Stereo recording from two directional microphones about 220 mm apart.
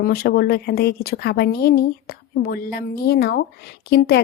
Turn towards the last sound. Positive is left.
turn(degrees=45)  # may be behind; listen again after turning